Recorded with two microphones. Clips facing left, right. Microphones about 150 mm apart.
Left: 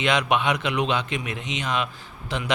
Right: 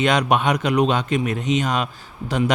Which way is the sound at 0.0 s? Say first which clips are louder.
Right 4 dB; 45° right (ahead or behind).